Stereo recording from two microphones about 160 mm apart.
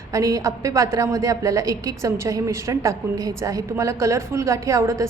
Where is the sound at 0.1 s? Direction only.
20° right (ahead or behind).